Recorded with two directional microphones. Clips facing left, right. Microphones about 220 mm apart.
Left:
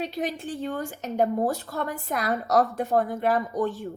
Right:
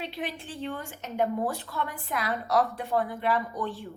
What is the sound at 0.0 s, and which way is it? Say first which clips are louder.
A woman's voice: left 6 dB; 45° left (ahead or behind).